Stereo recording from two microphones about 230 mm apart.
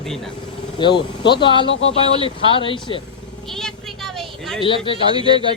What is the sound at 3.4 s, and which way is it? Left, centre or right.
Vehicle, centre.